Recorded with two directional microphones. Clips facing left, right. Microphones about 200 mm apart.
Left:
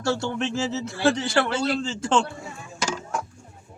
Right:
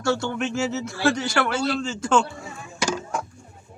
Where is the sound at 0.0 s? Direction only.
30° left (ahead or behind).